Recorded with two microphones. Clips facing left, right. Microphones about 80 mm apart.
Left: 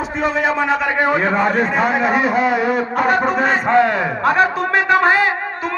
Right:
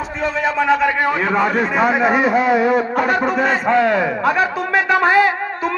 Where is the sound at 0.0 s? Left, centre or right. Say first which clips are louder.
Left 2 dB; centre.